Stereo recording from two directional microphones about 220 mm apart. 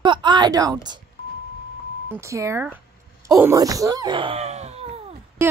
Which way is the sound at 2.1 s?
15° right (ahead or behind).